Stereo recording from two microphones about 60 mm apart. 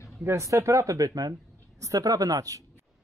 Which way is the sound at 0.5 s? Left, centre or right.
Right.